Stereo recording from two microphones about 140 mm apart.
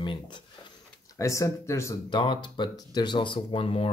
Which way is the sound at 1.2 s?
20° left (ahead or behind).